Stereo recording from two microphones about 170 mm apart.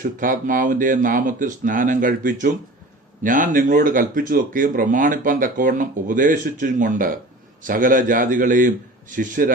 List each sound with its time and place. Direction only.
0.0 s speech: 50° right (ahead or behind)